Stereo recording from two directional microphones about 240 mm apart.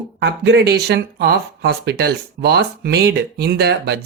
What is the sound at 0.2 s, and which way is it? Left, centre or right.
Speech, right.